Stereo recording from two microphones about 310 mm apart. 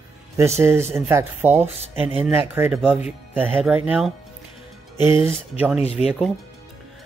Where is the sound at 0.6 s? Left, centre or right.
Centre.